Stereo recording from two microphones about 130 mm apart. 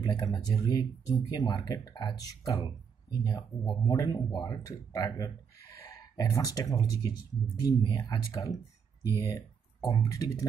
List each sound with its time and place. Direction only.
0.0 s speech: 35° left (ahead or behind)